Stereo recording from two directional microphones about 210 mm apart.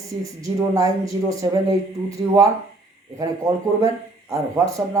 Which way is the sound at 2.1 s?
15° right (ahead or behind).